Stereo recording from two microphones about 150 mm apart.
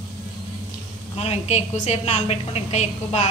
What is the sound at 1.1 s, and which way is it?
A woman's voice, 45° left (ahead or behind).